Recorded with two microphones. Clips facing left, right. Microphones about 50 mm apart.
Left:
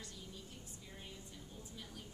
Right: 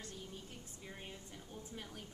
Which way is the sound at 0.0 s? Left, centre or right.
Right.